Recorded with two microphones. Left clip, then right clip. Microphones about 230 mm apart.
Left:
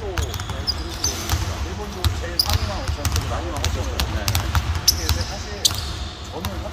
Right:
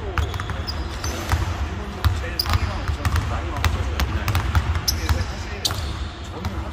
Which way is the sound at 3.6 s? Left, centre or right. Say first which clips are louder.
Even; centre.